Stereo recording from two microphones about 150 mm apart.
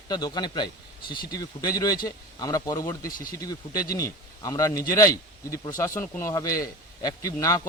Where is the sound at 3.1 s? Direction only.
70° left (ahead or behind).